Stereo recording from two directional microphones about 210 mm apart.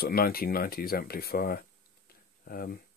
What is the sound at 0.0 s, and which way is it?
Speech, 45° left (ahead or behind).